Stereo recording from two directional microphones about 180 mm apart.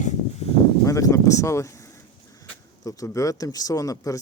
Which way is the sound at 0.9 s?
15° left (ahead or behind).